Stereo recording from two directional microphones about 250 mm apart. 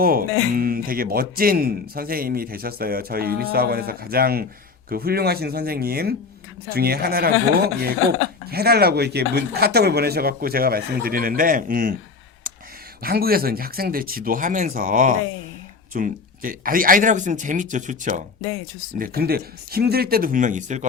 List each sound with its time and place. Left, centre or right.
0.0 s speech: right
8.4 s speech: right
13.0 s speech: right